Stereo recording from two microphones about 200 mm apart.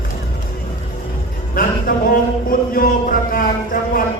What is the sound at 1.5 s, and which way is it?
Music, 45° left (ahead or behind).